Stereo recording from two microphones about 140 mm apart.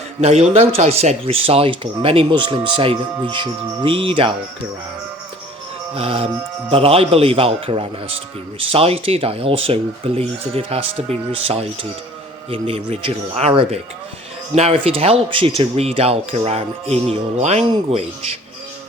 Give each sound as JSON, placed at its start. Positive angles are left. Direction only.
{"t": 0.2, "sound": "speech", "side_deg": -50}
{"t": 5.9, "sound": "a man's voice", "side_deg": -40}